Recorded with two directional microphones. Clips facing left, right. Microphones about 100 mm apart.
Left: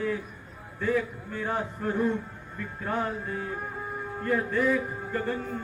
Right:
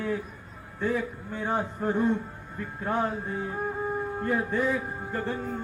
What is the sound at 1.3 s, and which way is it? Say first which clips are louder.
Speech: right 1 dB; 25° right (ahead or behind).